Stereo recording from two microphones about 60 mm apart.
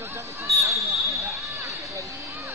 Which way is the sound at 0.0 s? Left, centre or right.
Right.